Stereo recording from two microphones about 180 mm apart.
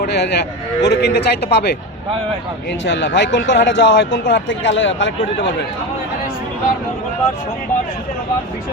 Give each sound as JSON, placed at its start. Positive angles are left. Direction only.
{"t": 0.0, "sound": "a man's voice", "side_deg": 65}
{"t": 2.8, "sound": "speech", "side_deg": 75}